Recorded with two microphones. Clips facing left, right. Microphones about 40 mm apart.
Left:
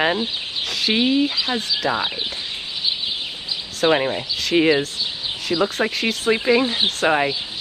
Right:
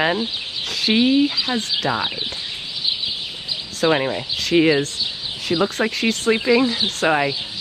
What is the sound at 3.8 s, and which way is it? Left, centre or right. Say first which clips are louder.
Speech: even; left.